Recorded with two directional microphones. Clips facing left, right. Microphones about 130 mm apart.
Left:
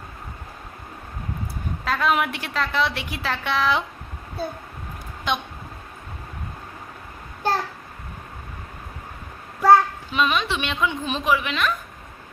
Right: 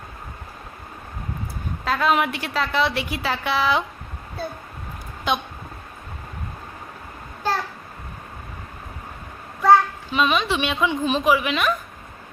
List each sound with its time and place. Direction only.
1.8 s a woman's voice: centre (ahead or behind)
5.3 s a woman's voice: 5° right (ahead or behind)
9.6 s a child's voice: centre (ahead or behind)